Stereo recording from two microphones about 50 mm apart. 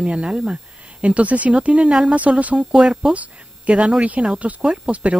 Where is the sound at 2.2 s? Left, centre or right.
Right.